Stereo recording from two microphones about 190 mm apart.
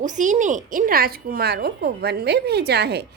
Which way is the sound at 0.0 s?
40° right (ahead or behind).